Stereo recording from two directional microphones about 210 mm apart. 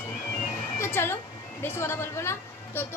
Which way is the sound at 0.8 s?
10° left (ahead or behind).